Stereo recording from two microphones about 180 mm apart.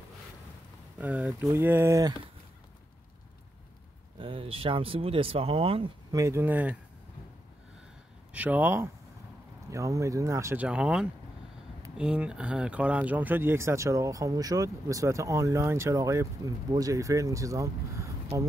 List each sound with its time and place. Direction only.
0.9 s speech: 10° right (ahead or behind)
4.2 s speech: 30° right (ahead or behind)
6.1 s speech: 15° right (ahead or behind)
8.3 s speech: 10° right (ahead or behind)